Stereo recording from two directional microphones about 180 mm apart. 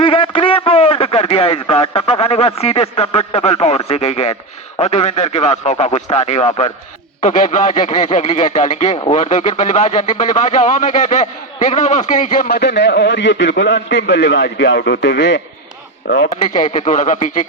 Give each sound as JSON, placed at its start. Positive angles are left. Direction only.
{"t": 0.0, "sound": "radio", "side_deg": 30}
{"t": 2.6, "sound": "speech", "side_deg": 35}
{"t": 16.0, "sound": "speech", "side_deg": 80}
{"t": 16.4, "sound": "speech", "side_deg": 40}